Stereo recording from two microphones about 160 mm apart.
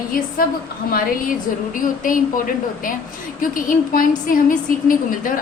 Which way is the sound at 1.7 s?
55° left (ahead or behind).